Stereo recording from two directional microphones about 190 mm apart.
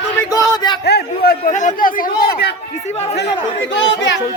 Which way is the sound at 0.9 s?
55° left (ahead or behind).